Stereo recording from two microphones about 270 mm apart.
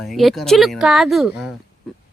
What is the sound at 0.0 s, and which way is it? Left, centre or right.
Speech, centre.